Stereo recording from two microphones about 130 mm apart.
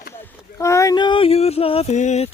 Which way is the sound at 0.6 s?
25° left (ahead or behind).